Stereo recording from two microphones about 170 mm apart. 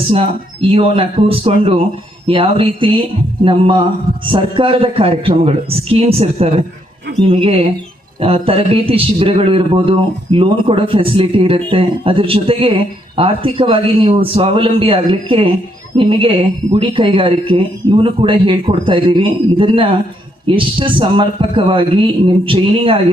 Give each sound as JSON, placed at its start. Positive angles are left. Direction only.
{"t": 0.1, "sound": "speech", "side_deg": -35}